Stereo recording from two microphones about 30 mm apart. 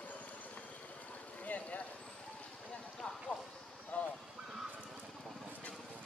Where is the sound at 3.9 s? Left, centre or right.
Left.